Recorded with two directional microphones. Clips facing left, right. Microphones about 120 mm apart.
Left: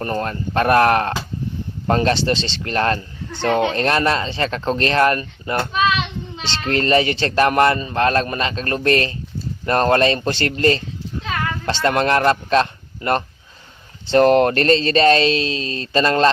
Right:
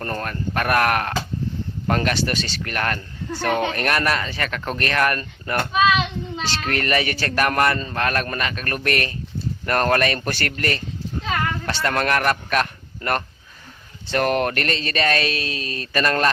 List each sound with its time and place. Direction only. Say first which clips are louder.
0.0 s speech: left 4 dB; 20° left (ahead or behind)